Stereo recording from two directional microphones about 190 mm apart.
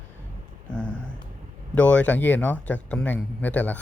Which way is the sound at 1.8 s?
5° left (ahead or behind).